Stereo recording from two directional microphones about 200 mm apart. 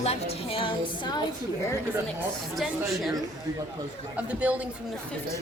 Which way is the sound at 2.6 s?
Centre (ahead or behind).